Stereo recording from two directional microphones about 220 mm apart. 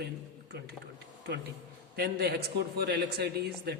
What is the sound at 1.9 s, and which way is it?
A man's voice, 45° right (ahead or behind).